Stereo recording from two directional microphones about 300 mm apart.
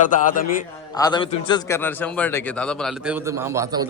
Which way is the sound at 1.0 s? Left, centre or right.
Centre.